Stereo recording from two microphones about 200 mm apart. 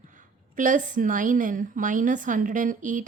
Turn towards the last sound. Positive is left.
turn(degrees=-40)  # may be behind; listen again after turning